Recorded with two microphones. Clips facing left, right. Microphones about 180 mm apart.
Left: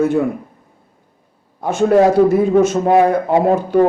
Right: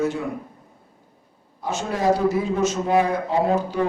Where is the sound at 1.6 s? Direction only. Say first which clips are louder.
Left 11 dB; 55° left (ahead or behind).